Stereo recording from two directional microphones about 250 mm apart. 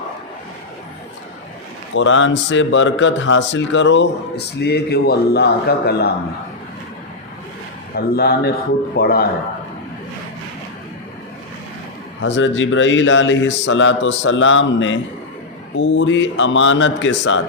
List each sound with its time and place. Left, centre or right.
2.0 s speech: left
7.9 s speech: left
12.2 s speech: left